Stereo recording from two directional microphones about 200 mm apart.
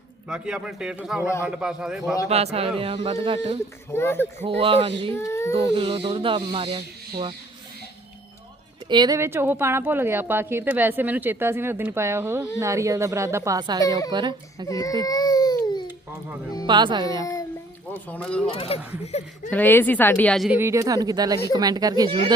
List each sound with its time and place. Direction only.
0.3 s a man's voice: 5° right (ahead or behind)
2.3 s speech: 30° right (ahead or behind)
3.9 s speech: 10° left (ahead or behind)
4.4 s speech: 30° right (ahead or behind)
5.1 s speech: 15° left (ahead or behind)
5.7 s speech: 25° right (ahead or behind)
8.9 s a woman's voice: 20° right (ahead or behind)
14.7 s baby cry: 15° left (ahead or behind)
16.6 s speech: 20° right (ahead or behind)
17.9 s a man's voice: 5° left (ahead or behind)
18.5 s speech: 30° left (ahead or behind)
19.5 s speech: 10° left (ahead or behind)
20.6 s speech: 15° right (ahead or behind)